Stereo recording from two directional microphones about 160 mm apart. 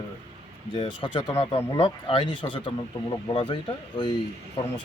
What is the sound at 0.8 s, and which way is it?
Speech, 35° left (ahead or behind).